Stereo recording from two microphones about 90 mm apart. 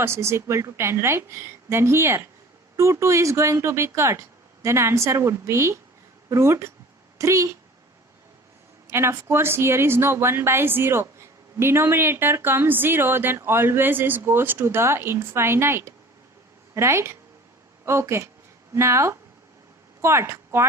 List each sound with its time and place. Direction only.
0.0 s a woman's voice: 30° right (ahead or behind)
8.9 s a woman's voice: 30° right (ahead or behind)